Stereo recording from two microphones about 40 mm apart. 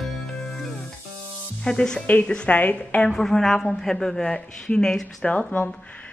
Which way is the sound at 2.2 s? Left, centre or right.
Left.